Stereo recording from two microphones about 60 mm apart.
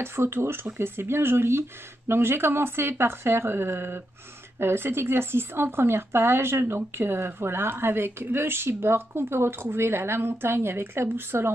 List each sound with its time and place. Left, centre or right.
0.0 s speech: right